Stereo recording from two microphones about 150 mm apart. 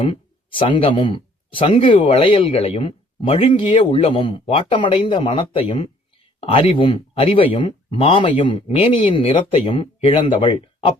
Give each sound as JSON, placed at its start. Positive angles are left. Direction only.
{"t": 0.0, "sound": "speech", "side_deg": 35}